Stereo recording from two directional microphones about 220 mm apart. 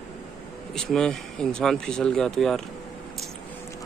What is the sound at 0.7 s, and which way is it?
Speech, 5° left (ahead or behind).